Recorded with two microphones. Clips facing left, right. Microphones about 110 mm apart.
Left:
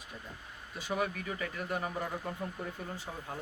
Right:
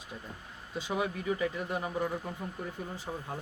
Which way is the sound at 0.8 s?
20° right (ahead or behind).